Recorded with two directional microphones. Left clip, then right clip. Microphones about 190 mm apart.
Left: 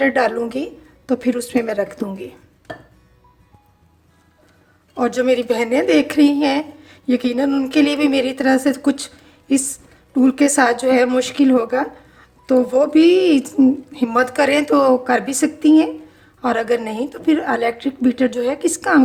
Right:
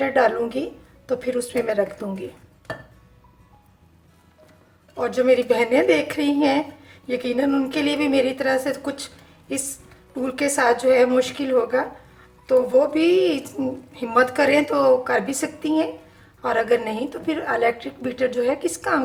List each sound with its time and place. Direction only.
0.0 s speech: 50° left (ahead or behind)
4.9 s speech: 50° left (ahead or behind)